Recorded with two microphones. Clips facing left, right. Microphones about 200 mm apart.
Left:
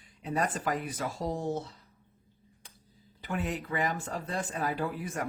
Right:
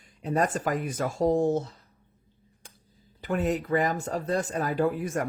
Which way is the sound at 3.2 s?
45° right (ahead or behind).